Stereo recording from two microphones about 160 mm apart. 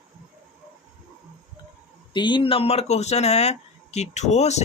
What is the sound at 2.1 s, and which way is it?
Speech, 30° left (ahead or behind).